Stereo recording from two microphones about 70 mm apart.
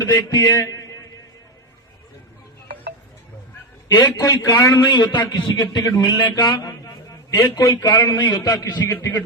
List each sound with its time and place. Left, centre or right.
0.0 s a man's voice: left
3.8 s a man's voice: left
4.8 s a man's voice: left
6.4 s a man's voice: left
8.2 s a man's voice: left